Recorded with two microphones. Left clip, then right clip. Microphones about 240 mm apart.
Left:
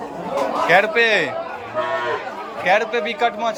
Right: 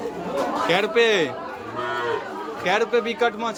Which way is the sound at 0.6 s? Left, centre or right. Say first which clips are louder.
Left 4 dB; centre.